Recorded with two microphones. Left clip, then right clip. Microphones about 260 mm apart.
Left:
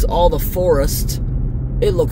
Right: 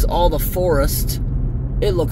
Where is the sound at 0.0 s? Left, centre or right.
Centre.